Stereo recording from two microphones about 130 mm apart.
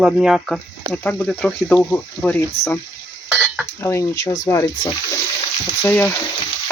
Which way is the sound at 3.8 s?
20° left (ahead or behind).